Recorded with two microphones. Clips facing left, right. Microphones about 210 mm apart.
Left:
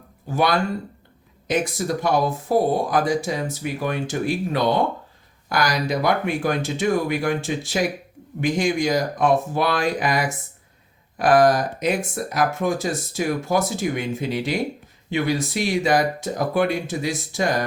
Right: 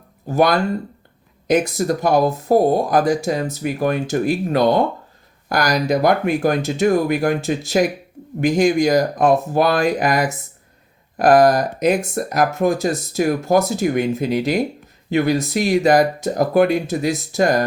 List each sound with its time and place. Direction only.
0.3 s speech: 40° right (ahead or behind)
2.0 s speech: 40° right (ahead or behind)